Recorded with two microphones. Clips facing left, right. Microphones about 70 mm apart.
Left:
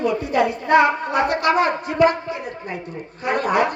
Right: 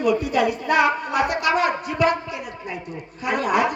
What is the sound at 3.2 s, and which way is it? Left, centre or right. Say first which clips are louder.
Speech: left 1 dB; left.